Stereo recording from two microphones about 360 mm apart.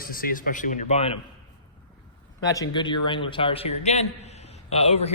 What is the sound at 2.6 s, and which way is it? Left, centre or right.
Speech, centre.